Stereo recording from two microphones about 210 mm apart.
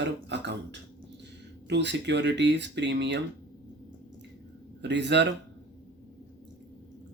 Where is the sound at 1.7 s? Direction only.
55° right (ahead or behind).